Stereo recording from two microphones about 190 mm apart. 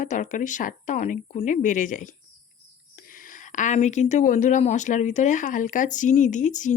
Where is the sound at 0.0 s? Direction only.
40° left (ahead or behind).